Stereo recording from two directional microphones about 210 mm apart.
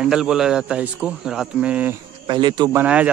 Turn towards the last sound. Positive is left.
turn(degrees=-5)  # may be behind; listen again after turning